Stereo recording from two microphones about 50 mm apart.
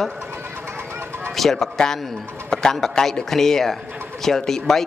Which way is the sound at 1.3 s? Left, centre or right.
Centre.